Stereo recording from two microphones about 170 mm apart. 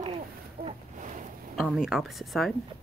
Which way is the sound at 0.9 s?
50° right (ahead or behind).